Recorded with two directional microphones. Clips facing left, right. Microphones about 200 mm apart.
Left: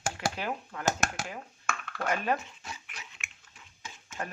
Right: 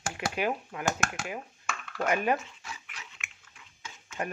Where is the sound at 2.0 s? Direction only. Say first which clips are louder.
Right 3 dB; 15° right (ahead or behind).